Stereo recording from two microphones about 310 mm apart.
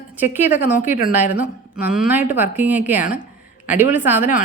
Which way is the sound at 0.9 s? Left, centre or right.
Left.